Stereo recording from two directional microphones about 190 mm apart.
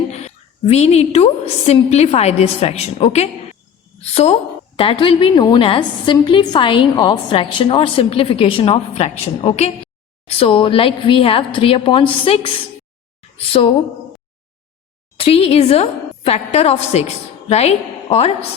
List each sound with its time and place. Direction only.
0.1 s a woman's voice: 35° left (ahead or behind)
15.2 s a woman's voice: 30° left (ahead or behind)